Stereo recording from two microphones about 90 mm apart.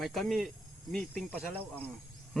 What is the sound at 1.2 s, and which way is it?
Speech, 20° left (ahead or behind).